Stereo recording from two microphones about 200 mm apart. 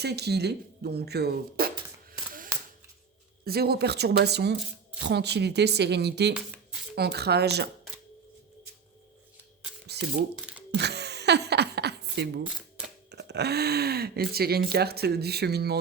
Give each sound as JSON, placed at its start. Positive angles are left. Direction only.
{"t": 0.0, "sound": "speech", "side_deg": -55}
{"t": 3.4, "sound": "speech", "side_deg": -50}
{"t": 9.8, "sound": "a sound", "side_deg": -55}
{"t": 13.1, "sound": "speech", "side_deg": -55}